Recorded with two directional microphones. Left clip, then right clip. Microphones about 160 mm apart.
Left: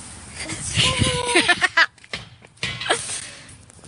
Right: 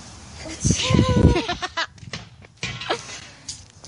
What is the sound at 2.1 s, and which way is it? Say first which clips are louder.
Music: left 3 dB; 70° right (ahead or behind).